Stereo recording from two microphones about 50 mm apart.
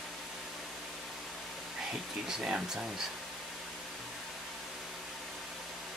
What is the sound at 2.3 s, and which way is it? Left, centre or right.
Speech, centre.